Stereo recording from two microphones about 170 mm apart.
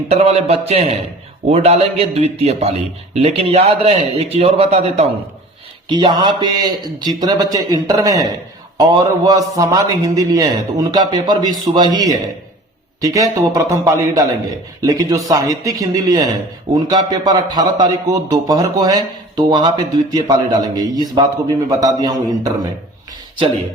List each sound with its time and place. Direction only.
0.1 s a man's voice: 40° right (ahead or behind)
5.9 s a man's voice: 25° right (ahead or behind)